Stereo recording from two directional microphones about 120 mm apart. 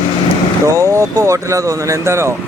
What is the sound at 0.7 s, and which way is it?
Speech, 25° right (ahead or behind).